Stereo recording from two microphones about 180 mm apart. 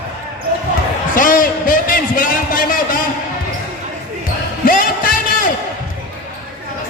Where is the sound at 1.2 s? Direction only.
50° left (ahead or behind).